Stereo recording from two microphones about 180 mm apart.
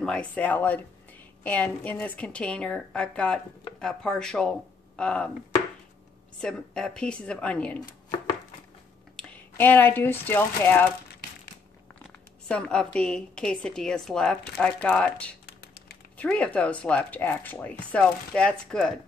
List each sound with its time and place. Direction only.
0.0 s a woman's voice: 5° left (ahead or behind)
6.4 s a woman's voice: 5° left (ahead or behind)
9.1 s speech: 10° left (ahead or behind)
12.4 s a woman's voice: 5° left (ahead or behind)
15.4 s typing: 65° left (ahead or behind)
16.2 s speech: 10° left (ahead or behind)